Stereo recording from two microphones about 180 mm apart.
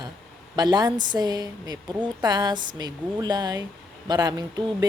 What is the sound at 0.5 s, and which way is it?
A woman's voice, 20° right (ahead or behind).